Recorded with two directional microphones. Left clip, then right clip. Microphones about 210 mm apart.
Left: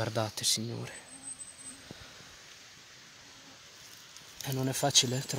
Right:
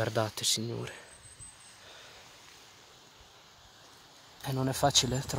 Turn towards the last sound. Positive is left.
turn(degrees=-5)  # may be behind; listen again after turning